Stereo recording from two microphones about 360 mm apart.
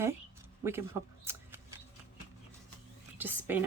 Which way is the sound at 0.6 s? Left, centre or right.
Centre.